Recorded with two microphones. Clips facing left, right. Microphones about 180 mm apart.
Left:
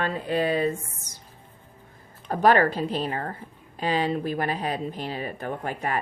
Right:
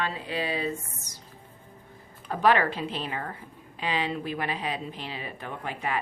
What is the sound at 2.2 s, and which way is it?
Speech, 40° left (ahead or behind).